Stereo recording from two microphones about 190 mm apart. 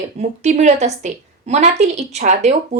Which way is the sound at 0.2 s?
35° right (ahead or behind).